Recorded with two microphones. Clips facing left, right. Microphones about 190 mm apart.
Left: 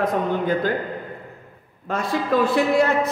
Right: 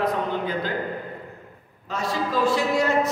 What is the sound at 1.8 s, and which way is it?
A man's voice, 55° left (ahead or behind).